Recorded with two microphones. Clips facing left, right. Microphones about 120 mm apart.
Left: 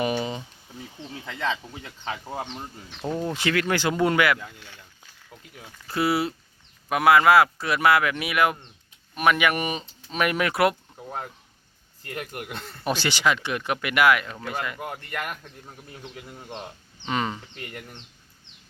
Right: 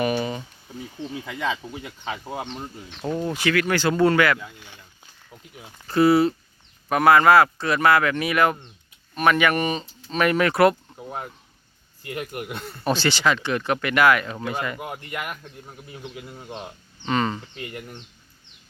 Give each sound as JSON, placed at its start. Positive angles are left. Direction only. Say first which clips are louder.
{"t": 0.0, "sound": "a sound", "louder": "right 2 dB", "side_deg": 20}
{"t": 1.3, "sound": "speech", "louder": "even", "side_deg": -10}
{"t": 3.2, "sound": "speech", "louder": "right 2 dB", "side_deg": 25}
{"t": 4.4, "sound": "speech", "louder": "right 1 dB", "side_deg": -5}
{"t": 10.9, "sound": "a sound", "louder": "right 1 dB", "side_deg": -10}
{"t": 12.0, "sound": "speech", "louder": "right 3 dB", "side_deg": -15}
{"t": 12.8, "sound": "speech", "louder": "right 2 dB", "side_deg": 15}
{"t": 14.8, "sound": "speech", "louder": "right 1 dB", "side_deg": -10}
{"t": 17.1, "sound": "speech", "louder": "right 4 dB", "side_deg": 10}
{"t": 17.4, "sound": "speech", "louder": "right 4 dB", "side_deg": -15}